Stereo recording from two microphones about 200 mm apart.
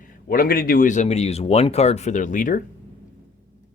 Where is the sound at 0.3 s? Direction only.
45° left (ahead or behind).